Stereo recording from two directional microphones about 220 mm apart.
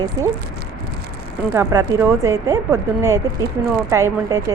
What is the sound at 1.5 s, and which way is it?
A woman's voice, 10° right (ahead or behind).